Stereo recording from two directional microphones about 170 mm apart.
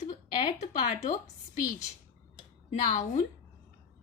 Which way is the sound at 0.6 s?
45° left (ahead or behind).